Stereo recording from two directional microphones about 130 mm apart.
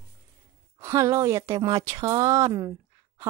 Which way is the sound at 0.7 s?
20° right (ahead or behind).